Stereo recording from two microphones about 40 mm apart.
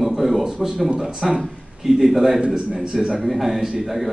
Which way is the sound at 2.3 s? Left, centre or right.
Right.